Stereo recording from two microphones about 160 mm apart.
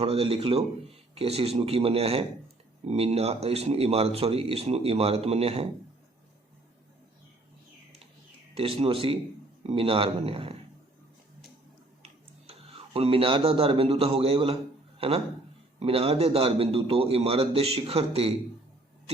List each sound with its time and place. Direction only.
0.0 s speech: 40° right (ahead or behind)
8.5 s speech: 35° right (ahead or behind)
12.0 s speech: 35° right (ahead or behind)